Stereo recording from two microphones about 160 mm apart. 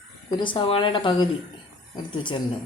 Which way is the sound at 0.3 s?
30° left (ahead or behind).